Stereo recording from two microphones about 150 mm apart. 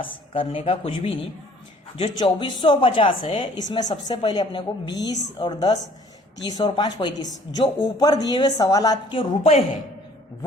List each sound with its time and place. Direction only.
0.0 s a woman's voice: 35° left (ahead or behind)
2.2 s a woman's voice: 30° left (ahead or behind)